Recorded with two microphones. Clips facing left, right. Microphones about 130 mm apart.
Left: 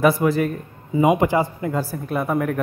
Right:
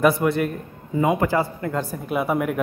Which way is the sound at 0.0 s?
Centre (ahead or behind).